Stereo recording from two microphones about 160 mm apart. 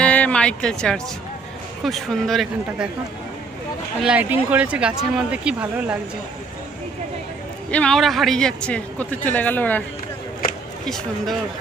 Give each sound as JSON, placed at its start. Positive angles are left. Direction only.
{"t": 0.0, "sound": "a sound", "side_deg": 10}
{"t": 1.8, "sound": "speech", "side_deg": 0}
{"t": 4.0, "sound": "speech", "side_deg": -10}
{"t": 7.7, "sound": "speech", "side_deg": 5}
{"t": 10.8, "sound": "speech", "side_deg": 0}